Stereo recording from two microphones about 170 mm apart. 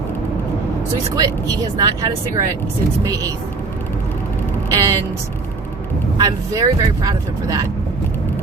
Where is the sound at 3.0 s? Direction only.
20° right (ahead or behind).